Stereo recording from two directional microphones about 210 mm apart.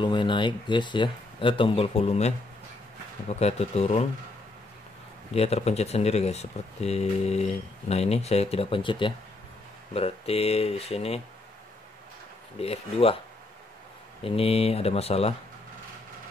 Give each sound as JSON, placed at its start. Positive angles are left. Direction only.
{"t": 0.0, "sound": "speech", "side_deg": 20}
{"t": 3.3, "sound": "speech", "side_deg": 30}
{"t": 5.3, "sound": "speech", "side_deg": 30}
{"t": 12.5, "sound": "speech", "side_deg": 30}
{"t": 14.2, "sound": "speech", "side_deg": 25}